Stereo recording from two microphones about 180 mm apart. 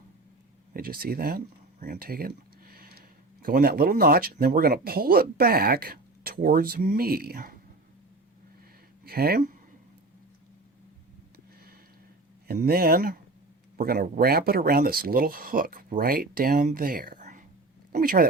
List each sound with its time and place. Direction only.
0.7 s speech: 55° right (ahead or behind)
1.8 s a sound: 55° right (ahead or behind)
3.4 s speech: 55° right (ahead or behind)
9.0 s speech: 60° right (ahead or behind)
12.5 s speech: 55° right (ahead or behind)